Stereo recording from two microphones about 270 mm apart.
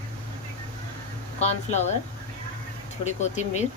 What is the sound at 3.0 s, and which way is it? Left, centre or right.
Speech, left.